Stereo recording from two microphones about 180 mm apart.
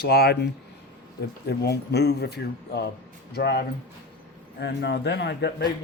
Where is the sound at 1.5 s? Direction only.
65° left (ahead or behind).